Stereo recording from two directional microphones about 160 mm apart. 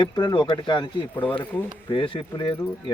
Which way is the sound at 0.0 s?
30° left (ahead or behind).